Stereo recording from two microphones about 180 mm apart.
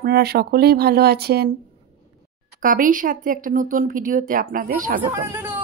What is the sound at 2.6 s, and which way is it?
Speech, 50° right (ahead or behind).